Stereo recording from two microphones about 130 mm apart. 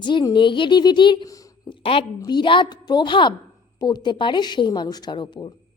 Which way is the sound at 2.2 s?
35° left (ahead or behind).